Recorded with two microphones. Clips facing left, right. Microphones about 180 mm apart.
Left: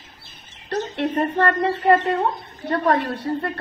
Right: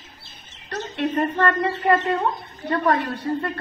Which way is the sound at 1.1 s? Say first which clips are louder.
Left 1 dB; 35° left (ahead or behind).